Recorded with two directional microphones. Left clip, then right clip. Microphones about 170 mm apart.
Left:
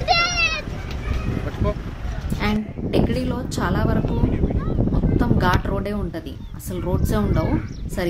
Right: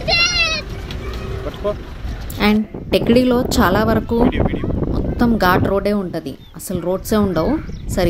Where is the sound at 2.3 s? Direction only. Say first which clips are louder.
Right 7 dB; 45° right (ahead or behind).